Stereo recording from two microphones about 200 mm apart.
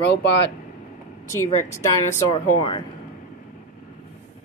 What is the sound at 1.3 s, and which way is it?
Speech, 15° left (ahead or behind).